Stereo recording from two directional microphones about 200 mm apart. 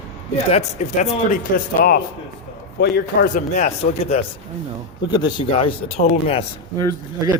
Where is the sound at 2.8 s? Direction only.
55° left (ahead or behind).